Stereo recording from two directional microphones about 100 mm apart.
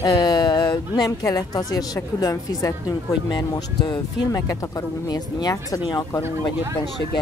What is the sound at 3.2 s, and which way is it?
Speech, 50° left (ahead or behind).